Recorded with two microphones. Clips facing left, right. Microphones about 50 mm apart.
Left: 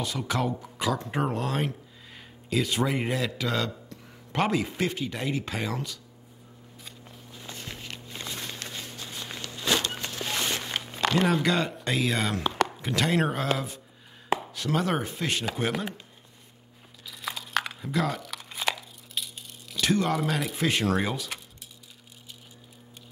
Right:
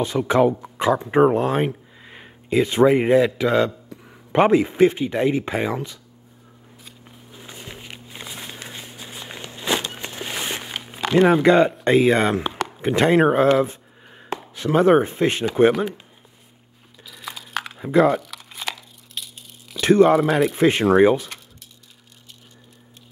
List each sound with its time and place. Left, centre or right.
0.0 s speech: right
7.1 s walk: centre
11.2 s speech: right
14.5 s speech: right
17.1 s a sound: centre
17.7 s speech: right
18.2 s tearing: centre
19.8 s speech: right
20.2 s a man's voice: centre
20.5 s speech: right